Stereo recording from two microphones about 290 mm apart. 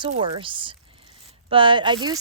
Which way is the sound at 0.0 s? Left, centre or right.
Centre.